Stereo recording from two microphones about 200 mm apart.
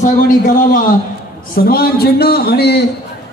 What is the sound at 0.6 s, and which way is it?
A man's voice, 45° left (ahead or behind).